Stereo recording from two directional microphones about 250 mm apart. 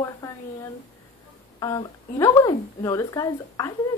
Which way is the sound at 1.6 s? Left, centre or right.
Centre.